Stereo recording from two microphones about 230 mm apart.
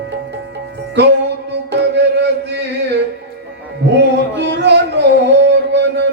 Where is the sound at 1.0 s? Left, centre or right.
Right.